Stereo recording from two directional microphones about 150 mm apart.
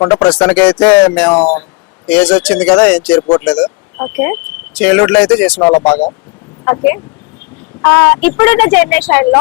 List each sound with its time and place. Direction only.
0.0 s speech: 10° left (ahead or behind)
3.2 s speech: 20° left (ahead or behind)
3.4 s speech: 5° left (ahead or behind)